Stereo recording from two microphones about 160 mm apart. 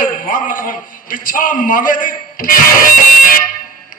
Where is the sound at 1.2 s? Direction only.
60° left (ahead or behind).